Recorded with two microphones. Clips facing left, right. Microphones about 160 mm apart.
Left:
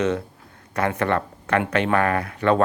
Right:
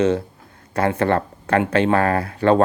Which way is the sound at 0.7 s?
30° right (ahead or behind).